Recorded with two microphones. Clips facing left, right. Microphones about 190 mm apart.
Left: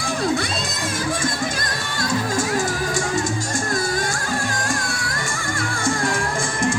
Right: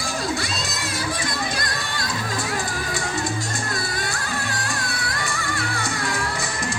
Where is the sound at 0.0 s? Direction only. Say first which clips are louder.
Left 5 dB; 55° left (ahead or behind).